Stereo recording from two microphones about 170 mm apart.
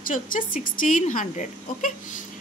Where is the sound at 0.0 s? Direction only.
50° left (ahead or behind).